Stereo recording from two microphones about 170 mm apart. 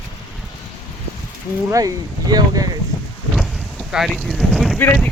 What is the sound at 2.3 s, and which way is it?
Speech, 25° right (ahead or behind).